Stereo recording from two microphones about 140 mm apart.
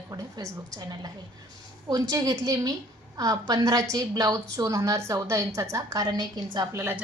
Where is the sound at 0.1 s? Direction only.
25° right (ahead or behind).